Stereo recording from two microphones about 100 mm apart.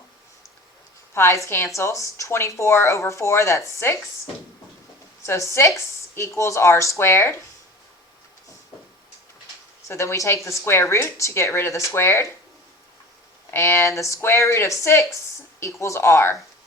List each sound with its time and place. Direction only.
1.1 s a woman's voice: 25° left (ahead or behind)
5.2 s a woman's voice: 30° left (ahead or behind)
9.8 s a woman's voice: 30° left (ahead or behind)
13.5 s a woman's voice: 25° left (ahead or behind)